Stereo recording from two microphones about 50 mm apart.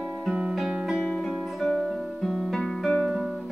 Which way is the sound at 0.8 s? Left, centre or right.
Centre.